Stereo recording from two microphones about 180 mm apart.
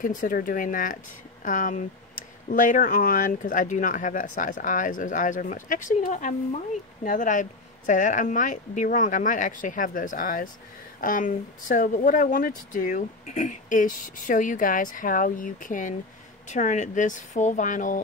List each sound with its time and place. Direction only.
0.0 s speech: 45° left (ahead or behind)